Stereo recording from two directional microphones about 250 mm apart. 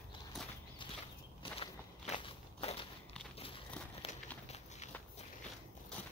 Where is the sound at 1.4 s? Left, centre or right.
Left.